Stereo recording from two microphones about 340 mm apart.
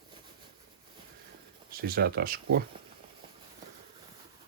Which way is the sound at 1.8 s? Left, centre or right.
Right.